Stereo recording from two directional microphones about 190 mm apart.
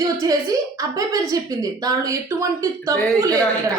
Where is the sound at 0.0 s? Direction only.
15° right (ahead or behind).